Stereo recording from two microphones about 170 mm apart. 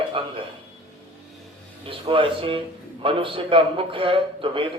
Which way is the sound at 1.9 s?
30° right (ahead or behind).